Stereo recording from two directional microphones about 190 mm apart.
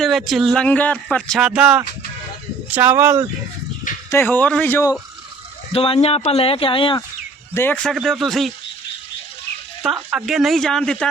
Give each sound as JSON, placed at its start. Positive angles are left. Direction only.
{"t": 0.0, "sound": "speech", "side_deg": 0}
{"t": 4.1, "sound": "speech", "side_deg": 10}
{"t": 5.7, "sound": "speech", "side_deg": 30}
{"t": 7.5, "sound": "speech", "side_deg": 10}
{"t": 9.8, "sound": "speech", "side_deg": 0}